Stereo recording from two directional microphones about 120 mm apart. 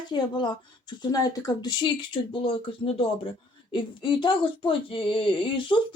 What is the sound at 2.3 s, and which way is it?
Speech, 50° left (ahead or behind).